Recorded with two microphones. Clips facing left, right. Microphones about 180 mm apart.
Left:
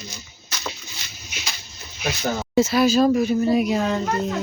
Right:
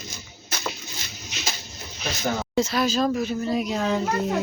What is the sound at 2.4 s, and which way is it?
Speech, 5° left (ahead or behind).